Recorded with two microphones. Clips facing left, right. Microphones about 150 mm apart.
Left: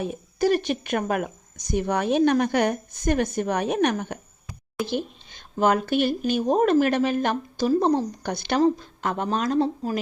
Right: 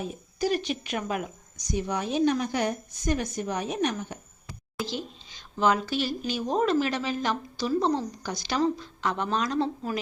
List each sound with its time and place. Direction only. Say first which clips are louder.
0.0 s speech: left 6 dB; 60° left (ahead or behind)
4.9 s a woman's voice: left 7 dB; 55° left (ahead or behind)